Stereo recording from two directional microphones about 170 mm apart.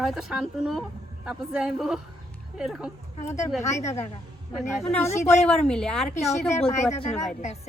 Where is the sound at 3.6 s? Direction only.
15° left (ahead or behind).